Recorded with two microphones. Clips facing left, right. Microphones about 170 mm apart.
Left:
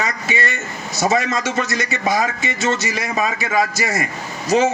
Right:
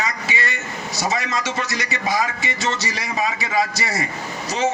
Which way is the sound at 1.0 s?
50° left (ahead or behind).